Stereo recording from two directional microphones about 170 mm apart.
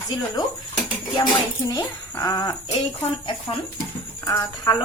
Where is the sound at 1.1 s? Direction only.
25° left (ahead or behind).